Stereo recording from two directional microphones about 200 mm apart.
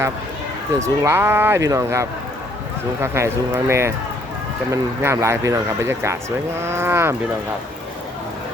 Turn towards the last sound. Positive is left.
turn(degrees=-10)  # may be behind; listen again after turning